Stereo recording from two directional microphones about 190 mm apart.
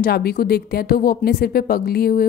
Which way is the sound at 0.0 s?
55° left (ahead or behind).